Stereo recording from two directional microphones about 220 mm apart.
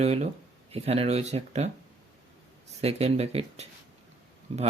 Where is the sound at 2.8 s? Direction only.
30° right (ahead or behind).